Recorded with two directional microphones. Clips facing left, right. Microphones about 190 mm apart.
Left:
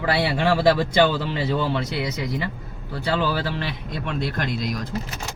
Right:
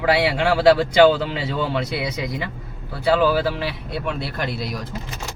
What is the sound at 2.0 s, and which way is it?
Speech, 15° right (ahead or behind).